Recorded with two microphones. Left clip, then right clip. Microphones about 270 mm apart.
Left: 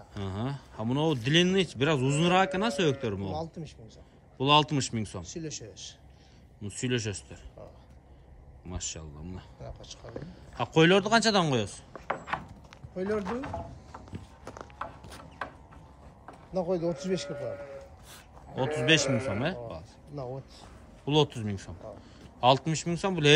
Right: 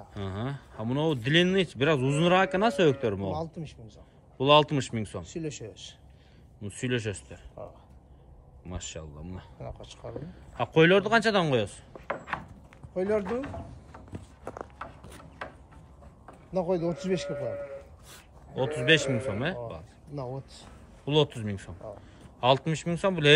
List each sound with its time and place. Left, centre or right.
0.1 s speech: centre
3.3 s speech: right
4.4 s speech: centre
5.2 s speech: right
6.6 s speech: centre
8.6 s speech: centre
9.6 s speech: right
10.1 s speech: centre
12.9 s speech: right
13.2 s speech: centre
14.1 s walk: centre
16.5 s speech: right
18.6 s speech: centre
21.0 s speech: centre